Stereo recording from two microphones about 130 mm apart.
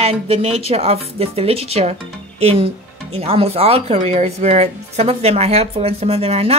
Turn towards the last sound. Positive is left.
turn(degrees=-50)  # may be behind; listen again after turning